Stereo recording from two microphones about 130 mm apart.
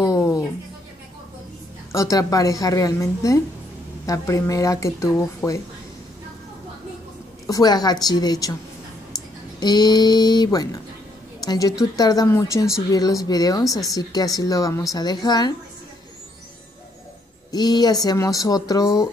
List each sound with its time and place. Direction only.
0.0 s a sound: 25° left (ahead or behind)
1.9 s speech: 25° left (ahead or behind)
7.4 s speech: 30° left (ahead or behind)
9.6 s a woman's voice: 30° left (ahead or behind)
17.5 s speech: 30° left (ahead or behind)